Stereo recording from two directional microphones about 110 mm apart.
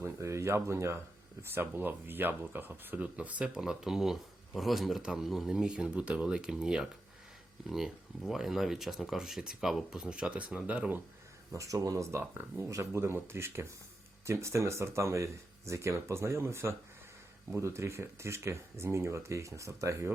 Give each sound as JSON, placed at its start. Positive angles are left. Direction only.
{"t": 0.0, "sound": "speech", "side_deg": -25}
{"t": 11.5, "sound": "speech", "side_deg": -30}
{"t": 12.2, "sound": "speech", "side_deg": -15}
{"t": 12.6, "sound": "speech", "side_deg": -30}